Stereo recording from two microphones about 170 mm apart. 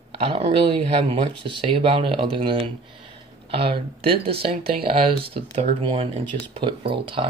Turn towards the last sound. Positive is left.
turn(degrees=-30)  # may be behind; listen again after turning